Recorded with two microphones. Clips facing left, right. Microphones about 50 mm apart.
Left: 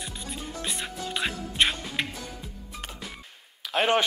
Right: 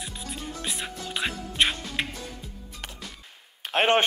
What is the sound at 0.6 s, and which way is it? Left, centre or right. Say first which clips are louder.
Music: left 2 dB; centre.